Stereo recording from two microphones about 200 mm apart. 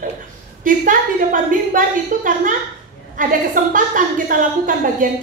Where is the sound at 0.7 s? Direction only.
40° right (ahead or behind).